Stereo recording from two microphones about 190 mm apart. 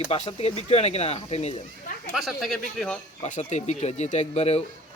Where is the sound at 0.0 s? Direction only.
30° left (ahead or behind).